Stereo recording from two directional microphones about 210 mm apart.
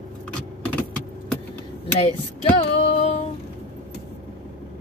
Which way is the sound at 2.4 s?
25° left (ahead or behind).